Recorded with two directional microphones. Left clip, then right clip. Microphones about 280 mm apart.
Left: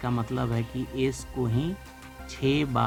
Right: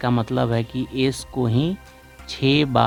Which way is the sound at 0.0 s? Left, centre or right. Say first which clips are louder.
Right 8 dB; right.